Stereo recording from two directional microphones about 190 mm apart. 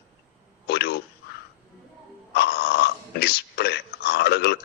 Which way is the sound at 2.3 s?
55° left (ahead or behind).